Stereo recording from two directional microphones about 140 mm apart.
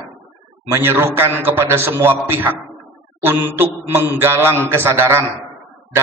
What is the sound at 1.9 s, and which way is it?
Speech, 15° right (ahead or behind).